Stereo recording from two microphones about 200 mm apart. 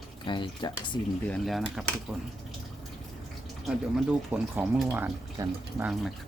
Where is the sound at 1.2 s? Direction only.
5° left (ahead or behind).